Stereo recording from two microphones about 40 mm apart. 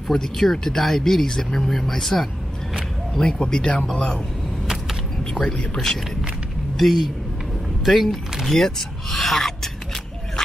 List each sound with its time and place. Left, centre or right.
0.1 s speech: centre
3.2 s speech: centre
5.2 s speech: left
6.8 s speech: centre